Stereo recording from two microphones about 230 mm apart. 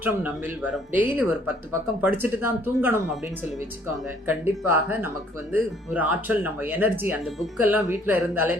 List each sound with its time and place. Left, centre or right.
0.0 s speech: centre
4.3 s speech: centre